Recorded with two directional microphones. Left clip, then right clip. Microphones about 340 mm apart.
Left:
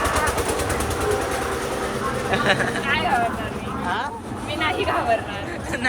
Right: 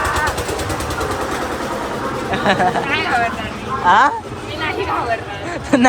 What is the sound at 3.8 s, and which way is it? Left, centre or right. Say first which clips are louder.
Speech: right 15 dB; centre.